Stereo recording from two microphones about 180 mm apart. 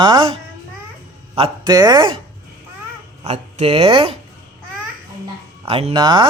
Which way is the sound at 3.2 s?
35° right (ahead or behind).